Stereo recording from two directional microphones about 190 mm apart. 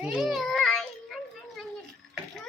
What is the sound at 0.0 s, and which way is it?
Children playing, 5° right (ahead or behind).